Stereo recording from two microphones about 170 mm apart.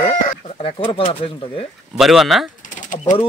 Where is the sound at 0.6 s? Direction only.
30° left (ahead or behind).